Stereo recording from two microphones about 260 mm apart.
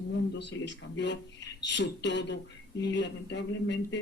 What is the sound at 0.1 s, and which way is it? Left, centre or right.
A woman's voice, left.